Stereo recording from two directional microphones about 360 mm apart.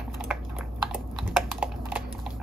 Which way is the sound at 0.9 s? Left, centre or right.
Centre.